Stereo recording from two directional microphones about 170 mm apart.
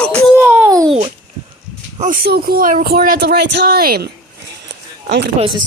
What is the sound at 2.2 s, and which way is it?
Speech, 60° right (ahead or behind).